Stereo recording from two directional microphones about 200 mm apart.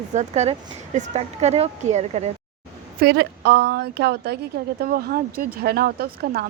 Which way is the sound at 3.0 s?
55° right (ahead or behind).